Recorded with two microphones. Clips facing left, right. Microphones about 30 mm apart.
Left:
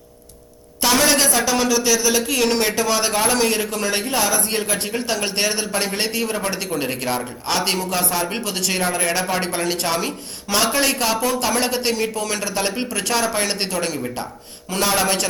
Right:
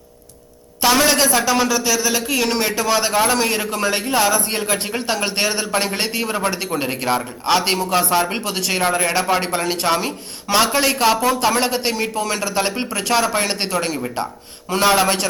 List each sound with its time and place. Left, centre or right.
0.8 s a man's voice: centre
8.3 s a man's voice: centre